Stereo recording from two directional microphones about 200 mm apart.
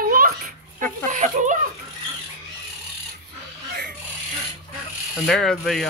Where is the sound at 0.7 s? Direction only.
40° right (ahead or behind).